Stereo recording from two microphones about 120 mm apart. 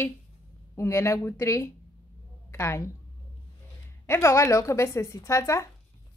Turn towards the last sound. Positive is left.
turn(degrees=25)  # may be behind; listen again after turning